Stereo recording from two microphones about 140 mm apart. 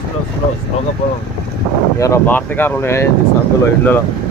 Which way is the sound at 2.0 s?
15° left (ahead or behind).